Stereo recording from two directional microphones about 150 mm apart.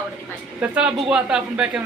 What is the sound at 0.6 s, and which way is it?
Speech, 5° right (ahead or behind).